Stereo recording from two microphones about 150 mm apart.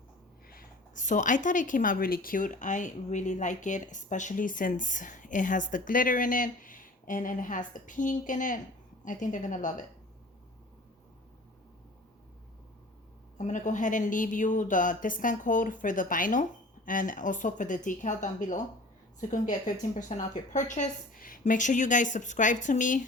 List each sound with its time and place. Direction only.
0.5 s speech: 65° left (ahead or behind)
13.4 s speech: 55° left (ahead or behind)